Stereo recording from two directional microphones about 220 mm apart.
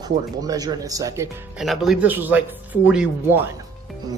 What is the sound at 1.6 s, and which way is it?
Speech, centre (ahead or behind).